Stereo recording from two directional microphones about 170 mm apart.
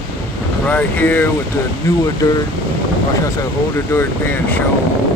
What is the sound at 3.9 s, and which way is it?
Speech, 15° left (ahead or behind).